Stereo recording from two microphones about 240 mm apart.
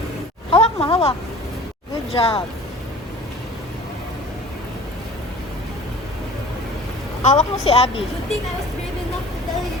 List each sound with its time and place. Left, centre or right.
0.5 s a sound: left
2.1 s a woman's voice: left
7.2 s a woman's voice: left